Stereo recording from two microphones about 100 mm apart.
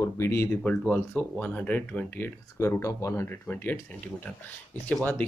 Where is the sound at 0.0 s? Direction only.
25° left (ahead or behind).